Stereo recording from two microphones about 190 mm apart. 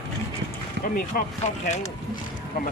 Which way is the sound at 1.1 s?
50° left (ahead or behind).